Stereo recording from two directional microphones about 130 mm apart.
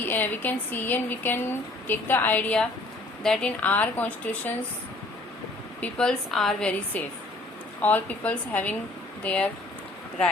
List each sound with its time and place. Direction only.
0.0 s speech: 15° left (ahead or behind)
5.8 s speech: 5° left (ahead or behind)